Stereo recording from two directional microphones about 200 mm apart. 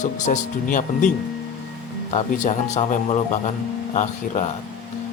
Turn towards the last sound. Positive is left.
turn(degrees=35)  # may be behind; listen again after turning